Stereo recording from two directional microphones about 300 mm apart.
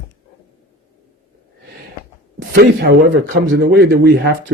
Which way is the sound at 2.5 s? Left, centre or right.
Right.